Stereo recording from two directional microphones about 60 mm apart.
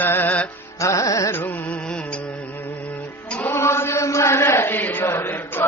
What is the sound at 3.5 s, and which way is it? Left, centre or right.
Chant, left.